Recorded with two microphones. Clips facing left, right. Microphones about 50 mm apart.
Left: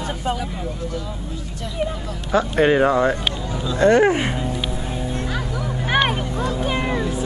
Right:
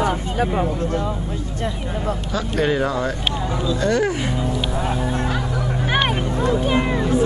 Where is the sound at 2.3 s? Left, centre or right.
Left.